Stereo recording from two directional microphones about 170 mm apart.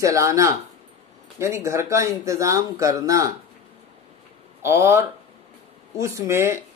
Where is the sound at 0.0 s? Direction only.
20° right (ahead or behind).